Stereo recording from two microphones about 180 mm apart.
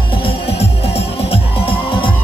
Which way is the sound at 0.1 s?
30° left (ahead or behind).